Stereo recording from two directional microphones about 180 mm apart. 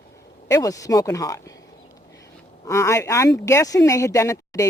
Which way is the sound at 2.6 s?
15° left (ahead or behind).